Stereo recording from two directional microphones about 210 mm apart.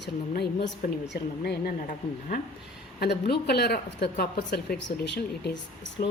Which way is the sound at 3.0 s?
50° left (ahead or behind).